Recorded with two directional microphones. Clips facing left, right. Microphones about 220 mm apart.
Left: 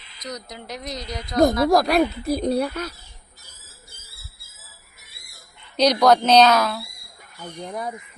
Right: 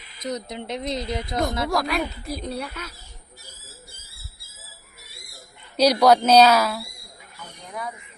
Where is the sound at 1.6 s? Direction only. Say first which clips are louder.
Left 7 dB; 40° left (ahead or behind).